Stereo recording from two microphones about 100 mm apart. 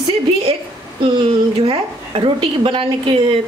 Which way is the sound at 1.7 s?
65° right (ahead or behind).